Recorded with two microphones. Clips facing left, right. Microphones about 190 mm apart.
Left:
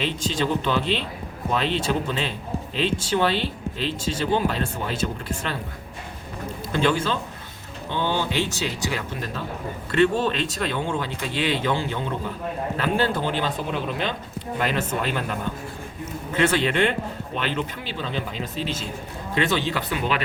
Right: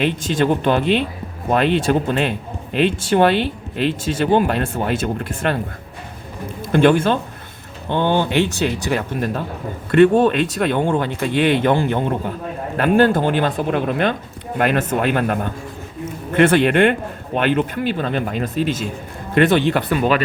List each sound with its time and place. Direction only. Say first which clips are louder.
0.0 s speech: right 7 dB; 55° right (ahead or behind)
6.7 s speech: right 9 dB; 55° right (ahead or behind)